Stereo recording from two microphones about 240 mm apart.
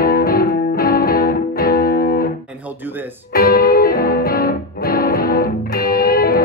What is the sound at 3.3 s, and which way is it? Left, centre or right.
Music, left.